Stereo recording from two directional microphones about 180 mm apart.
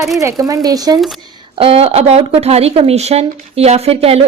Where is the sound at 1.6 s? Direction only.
30° right (ahead or behind).